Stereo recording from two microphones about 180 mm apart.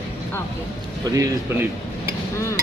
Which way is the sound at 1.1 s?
20° right (ahead or behind).